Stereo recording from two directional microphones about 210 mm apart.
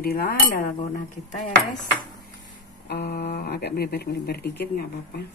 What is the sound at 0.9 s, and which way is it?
Dishes, 35° left (ahead or behind).